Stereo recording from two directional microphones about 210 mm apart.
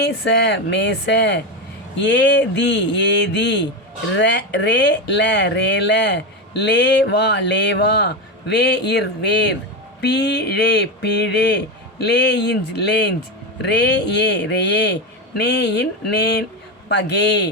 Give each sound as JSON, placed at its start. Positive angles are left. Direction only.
{"t": 0.0, "sound": "speech", "side_deg": 50}